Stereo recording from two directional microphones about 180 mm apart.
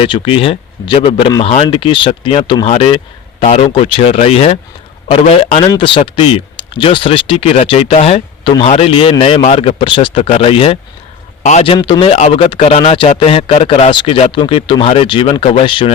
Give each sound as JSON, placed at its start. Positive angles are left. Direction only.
{"t": 0.0, "sound": "a man's voice", "side_deg": 30}